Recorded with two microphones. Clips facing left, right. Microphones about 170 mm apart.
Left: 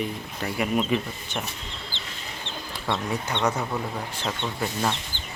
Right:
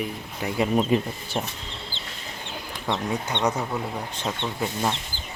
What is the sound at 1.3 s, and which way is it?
Speech, 30° right (ahead or behind).